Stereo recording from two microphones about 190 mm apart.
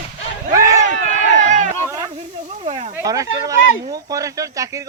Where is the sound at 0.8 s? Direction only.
40° right (ahead or behind).